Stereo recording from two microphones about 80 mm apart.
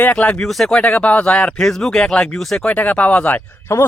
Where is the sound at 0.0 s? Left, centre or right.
Centre.